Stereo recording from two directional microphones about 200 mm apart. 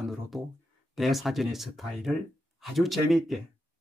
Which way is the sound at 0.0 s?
Centre (ahead or behind).